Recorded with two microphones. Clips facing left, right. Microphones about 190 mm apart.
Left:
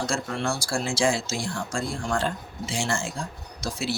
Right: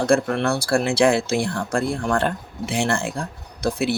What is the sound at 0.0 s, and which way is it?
Speech, 60° right (ahead or behind).